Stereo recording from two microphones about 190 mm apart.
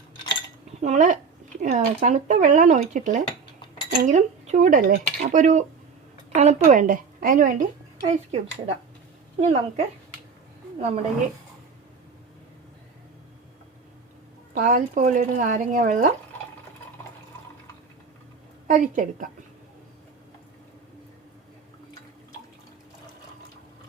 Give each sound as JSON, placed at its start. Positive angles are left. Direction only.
{"t": 0.8, "sound": "a woman's voice", "side_deg": -40}
{"t": 14.6, "sound": "speech", "side_deg": -45}
{"t": 18.7, "sound": "a woman's voice", "side_deg": -45}